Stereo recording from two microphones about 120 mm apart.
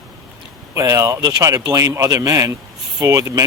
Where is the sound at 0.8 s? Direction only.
30° right (ahead or behind).